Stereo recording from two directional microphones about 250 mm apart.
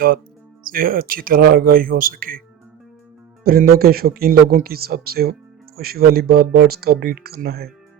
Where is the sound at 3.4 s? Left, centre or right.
Right.